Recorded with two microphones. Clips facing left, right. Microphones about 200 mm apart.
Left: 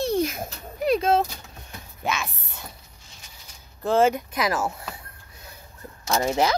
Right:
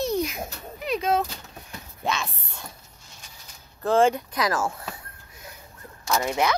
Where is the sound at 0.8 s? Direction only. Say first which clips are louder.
Left 4 dB; 30° left (ahead or behind).